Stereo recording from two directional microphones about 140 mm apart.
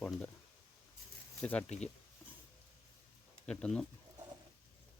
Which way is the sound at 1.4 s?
10° left (ahead or behind).